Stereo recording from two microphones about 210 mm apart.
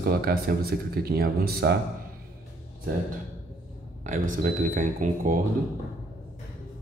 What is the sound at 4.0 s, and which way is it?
Speech, 35° right (ahead or behind).